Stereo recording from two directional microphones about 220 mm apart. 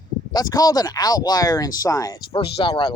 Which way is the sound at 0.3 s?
15° left (ahead or behind).